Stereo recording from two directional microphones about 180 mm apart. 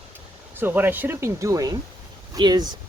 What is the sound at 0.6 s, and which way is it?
Speech, 10° right (ahead or behind).